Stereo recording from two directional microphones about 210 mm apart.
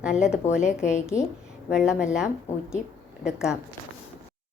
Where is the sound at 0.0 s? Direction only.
5° right (ahead or behind).